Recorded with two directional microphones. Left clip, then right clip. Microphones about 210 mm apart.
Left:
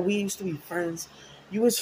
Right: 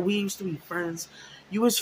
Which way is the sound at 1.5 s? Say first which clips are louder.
Left 1 dB; 15° right (ahead or behind).